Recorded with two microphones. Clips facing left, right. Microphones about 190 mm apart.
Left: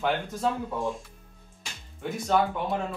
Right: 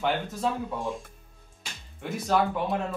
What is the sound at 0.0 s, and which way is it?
Speech, centre (ahead or behind).